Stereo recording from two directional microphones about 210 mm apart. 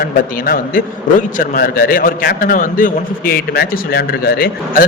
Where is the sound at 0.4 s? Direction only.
40° left (ahead or behind).